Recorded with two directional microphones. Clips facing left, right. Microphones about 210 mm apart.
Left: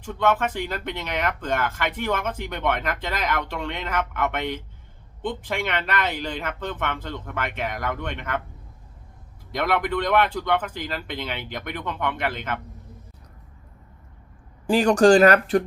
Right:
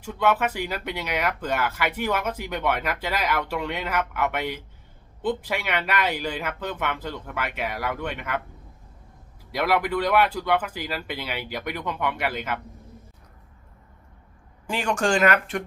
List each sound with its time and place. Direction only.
0.0 s speech: 10° right (ahead or behind)
9.5 s speech: 10° right (ahead or behind)
14.7 s speech: 35° left (ahead or behind)